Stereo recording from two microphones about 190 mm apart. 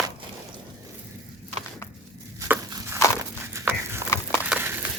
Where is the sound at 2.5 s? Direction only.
15° right (ahead or behind).